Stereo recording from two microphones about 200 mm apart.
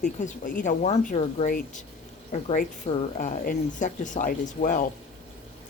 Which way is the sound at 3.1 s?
40° left (ahead or behind).